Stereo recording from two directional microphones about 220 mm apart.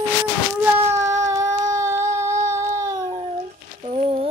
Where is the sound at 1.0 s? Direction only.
15° right (ahead or behind).